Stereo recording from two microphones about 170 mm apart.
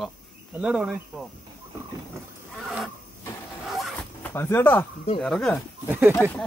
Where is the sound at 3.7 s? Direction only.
Centre (ahead or behind).